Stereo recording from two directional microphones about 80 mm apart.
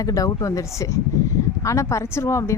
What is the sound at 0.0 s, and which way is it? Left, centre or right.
A woman's voice, left.